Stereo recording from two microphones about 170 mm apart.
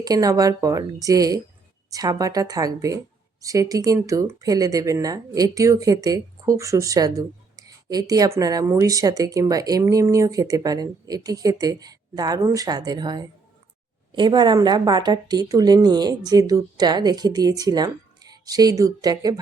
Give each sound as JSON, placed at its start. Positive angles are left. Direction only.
{"t": 0.0, "sound": "speech", "side_deg": -20}